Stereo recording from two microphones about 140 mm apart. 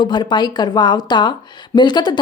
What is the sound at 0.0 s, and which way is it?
Speech, 35° left (ahead or behind).